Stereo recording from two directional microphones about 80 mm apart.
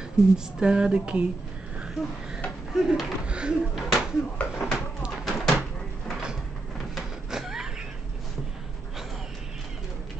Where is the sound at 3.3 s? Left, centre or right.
Centre.